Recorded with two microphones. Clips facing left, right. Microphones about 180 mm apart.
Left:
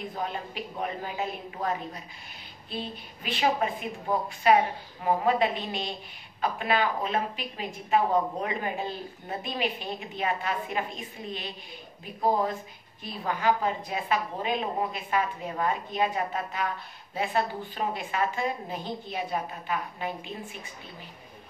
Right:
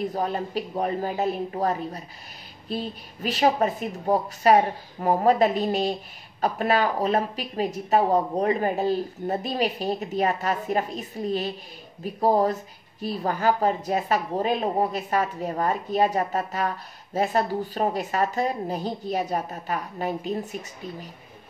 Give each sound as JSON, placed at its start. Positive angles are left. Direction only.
{"t": 0.0, "sound": "a woman's voice", "side_deg": -40}